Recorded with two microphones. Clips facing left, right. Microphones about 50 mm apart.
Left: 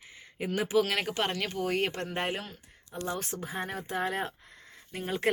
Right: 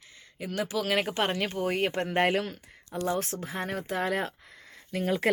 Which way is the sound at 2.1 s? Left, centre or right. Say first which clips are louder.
Right 8 dB; right.